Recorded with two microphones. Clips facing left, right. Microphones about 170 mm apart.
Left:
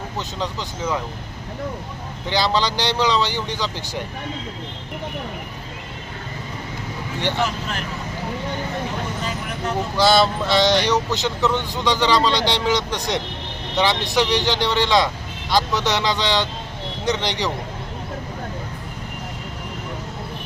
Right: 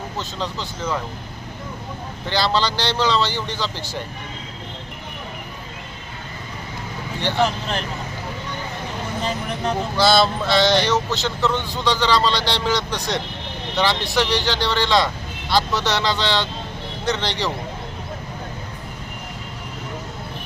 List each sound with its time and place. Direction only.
0.2 s speech: 15° left (ahead or behind)
0.8 s speech: 5° left (ahead or behind)
2.3 s speech: 15° left (ahead or behind)
7.4 s speech: 30° right (ahead or behind)
10.0 s speech: 15° left (ahead or behind)